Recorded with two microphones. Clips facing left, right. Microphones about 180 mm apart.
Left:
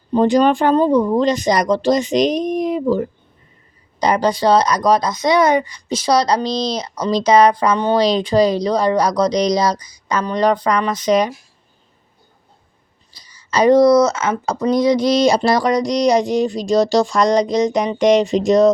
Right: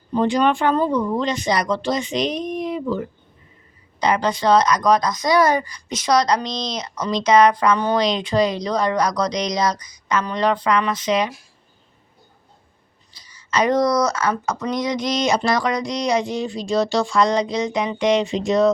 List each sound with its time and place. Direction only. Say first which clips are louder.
0.1 s speech: left 5 dB; 40° left (ahead or behind)
13.1 s speech: left 3 dB; 40° left (ahead or behind)